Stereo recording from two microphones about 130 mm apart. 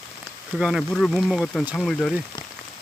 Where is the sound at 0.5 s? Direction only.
5° right (ahead or behind).